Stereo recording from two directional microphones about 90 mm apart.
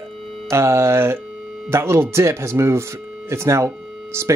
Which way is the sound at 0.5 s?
30° right (ahead or behind).